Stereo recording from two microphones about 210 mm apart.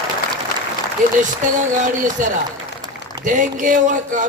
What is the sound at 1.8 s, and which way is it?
A man's voice, 35° right (ahead or behind).